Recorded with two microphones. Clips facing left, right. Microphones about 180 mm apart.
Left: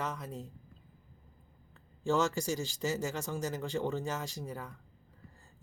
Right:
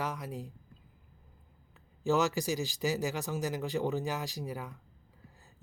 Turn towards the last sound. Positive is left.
turn(degrees=-5)  # may be behind; listen again after turning